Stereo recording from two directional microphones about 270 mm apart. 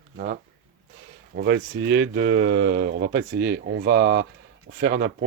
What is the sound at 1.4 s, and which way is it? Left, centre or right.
Speech, right.